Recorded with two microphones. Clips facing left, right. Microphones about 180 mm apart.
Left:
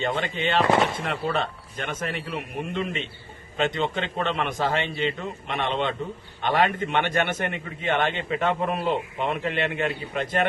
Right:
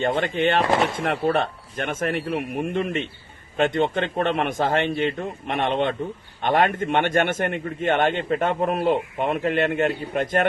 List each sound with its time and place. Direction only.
0.0 s a man's voice: 50° right (ahead or behind)